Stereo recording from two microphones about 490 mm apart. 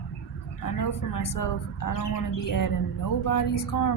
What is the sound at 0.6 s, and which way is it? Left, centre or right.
Speech, left.